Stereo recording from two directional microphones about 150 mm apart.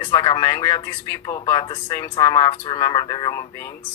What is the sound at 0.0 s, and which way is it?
Speech, 30° left (ahead or behind).